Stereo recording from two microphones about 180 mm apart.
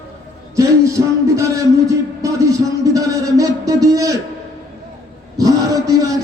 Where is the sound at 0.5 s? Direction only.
15° right (ahead or behind).